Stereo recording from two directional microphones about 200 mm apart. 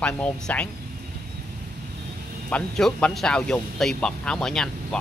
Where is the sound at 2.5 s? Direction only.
5° left (ahead or behind).